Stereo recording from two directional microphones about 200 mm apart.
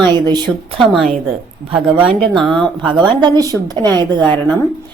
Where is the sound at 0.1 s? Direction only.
20° right (ahead or behind).